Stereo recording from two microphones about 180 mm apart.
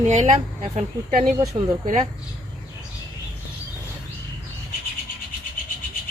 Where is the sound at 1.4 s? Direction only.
20° right (ahead or behind).